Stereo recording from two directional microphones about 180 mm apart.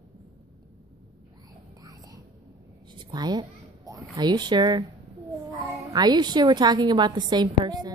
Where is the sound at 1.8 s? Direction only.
20° right (ahead or behind).